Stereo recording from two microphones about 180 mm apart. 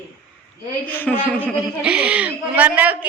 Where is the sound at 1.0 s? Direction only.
10° left (ahead or behind).